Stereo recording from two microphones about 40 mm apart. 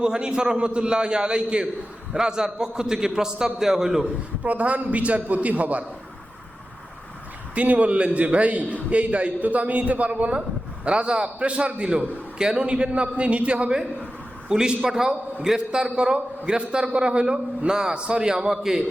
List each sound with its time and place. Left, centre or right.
0.0 s a man's voice: right
4.4 s a man's voice: right
7.5 s a man's voice: right
10.8 s a man's voice: right
14.5 s a man's voice: centre